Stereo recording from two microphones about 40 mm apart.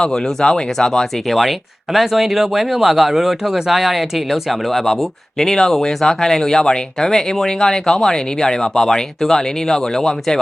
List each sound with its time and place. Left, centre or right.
0.0 s speech: centre
1.3 s speech: centre